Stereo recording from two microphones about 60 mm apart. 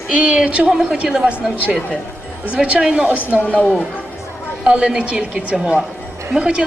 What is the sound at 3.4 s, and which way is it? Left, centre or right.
Speech, left.